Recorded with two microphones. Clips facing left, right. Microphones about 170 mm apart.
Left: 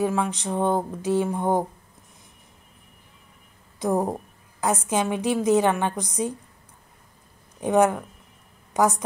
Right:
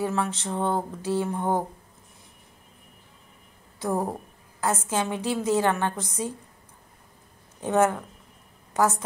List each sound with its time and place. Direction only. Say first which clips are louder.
0.0 s a woman's voice: left 3 dB; 15° left (ahead or behind)
3.8 s a woman's voice: left 4 dB; 20° left (ahead or behind)
7.6 s a woman's voice: left 3 dB; 15° left (ahead or behind)